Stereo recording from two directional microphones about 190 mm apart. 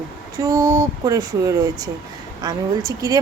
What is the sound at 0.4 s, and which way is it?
A woman's voice, 20° right (ahead or behind).